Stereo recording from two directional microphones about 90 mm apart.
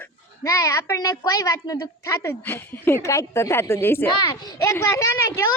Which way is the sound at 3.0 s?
35° left (ahead or behind).